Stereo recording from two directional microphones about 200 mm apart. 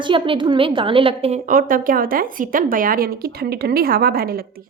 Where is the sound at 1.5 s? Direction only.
45° right (ahead or behind).